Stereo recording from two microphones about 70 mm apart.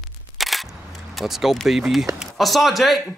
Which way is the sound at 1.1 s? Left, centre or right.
Centre.